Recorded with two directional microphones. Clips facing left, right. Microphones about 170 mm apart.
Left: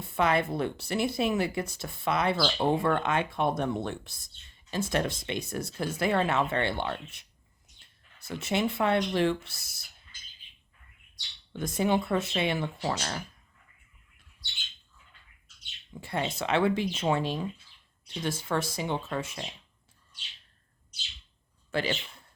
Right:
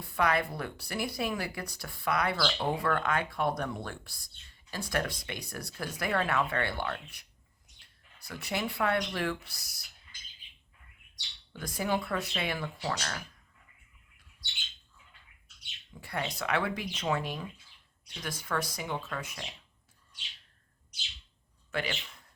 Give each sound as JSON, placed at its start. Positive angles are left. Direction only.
{"t": 0.0, "sound": "speech", "side_deg": 25}
{"t": 11.5, "sound": "speech", "side_deg": 25}
{"t": 16.0, "sound": "speech", "side_deg": 25}
{"t": 21.7, "sound": "a man's voice", "side_deg": 30}